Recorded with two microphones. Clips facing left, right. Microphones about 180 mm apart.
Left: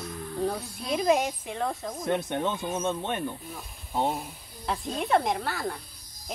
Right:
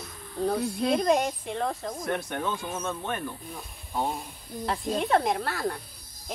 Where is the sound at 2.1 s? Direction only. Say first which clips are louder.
Left 3 dB; 20° left (ahead or behind).